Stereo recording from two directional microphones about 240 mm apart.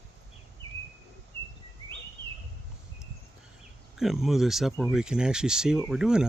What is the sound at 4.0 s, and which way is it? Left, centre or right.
Speech, centre.